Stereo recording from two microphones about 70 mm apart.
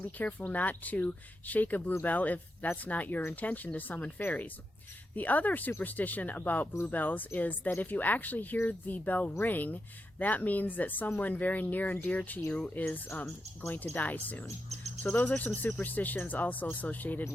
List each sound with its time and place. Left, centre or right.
0.2 s speech: left